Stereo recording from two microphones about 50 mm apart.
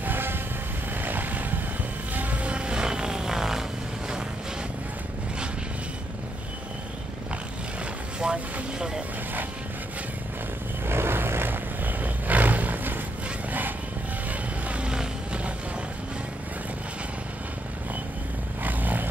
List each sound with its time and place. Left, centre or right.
0.0 s vehicle: right
2.5 s vehicle: centre
8.2 s vehicle: centre
10.9 s vehicle: right
14.7 s vehicle: centre
18.6 s vehicle: right